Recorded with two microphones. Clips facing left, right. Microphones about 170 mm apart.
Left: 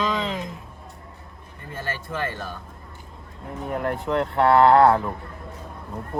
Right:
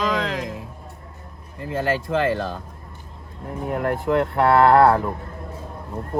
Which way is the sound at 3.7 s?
45° right (ahead or behind).